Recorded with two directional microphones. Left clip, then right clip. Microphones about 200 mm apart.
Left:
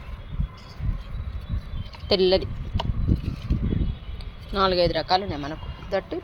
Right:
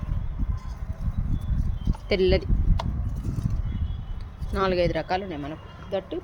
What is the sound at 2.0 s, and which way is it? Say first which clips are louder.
Speech: left 3 dB; centre (ahead or behind).